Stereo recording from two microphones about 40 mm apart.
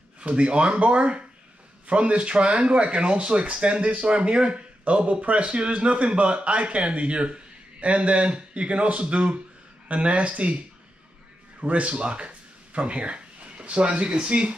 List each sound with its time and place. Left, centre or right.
0.2 s speech: right
11.6 s speech: right